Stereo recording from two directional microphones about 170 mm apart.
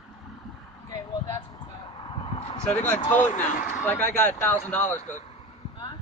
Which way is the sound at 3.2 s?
45° left (ahead or behind).